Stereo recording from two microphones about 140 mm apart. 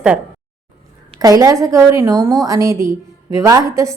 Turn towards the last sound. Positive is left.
turn(degrees=-20)  # may be behind; listen again after turning